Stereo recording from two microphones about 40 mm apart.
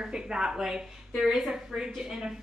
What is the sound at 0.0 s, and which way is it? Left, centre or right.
A woman's voice, centre.